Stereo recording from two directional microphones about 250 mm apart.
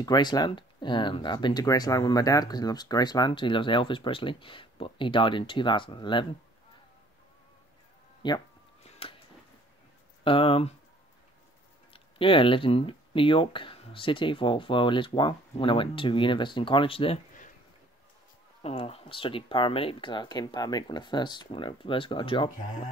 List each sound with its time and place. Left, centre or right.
0.0 s speech: centre
8.2 s speech: centre
8.8 s a sound: left
10.2 s speech: left
11.9 s speech: centre
18.6 s speech: left